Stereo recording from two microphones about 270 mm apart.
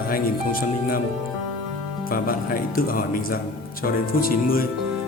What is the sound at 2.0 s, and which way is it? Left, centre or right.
Speech, left.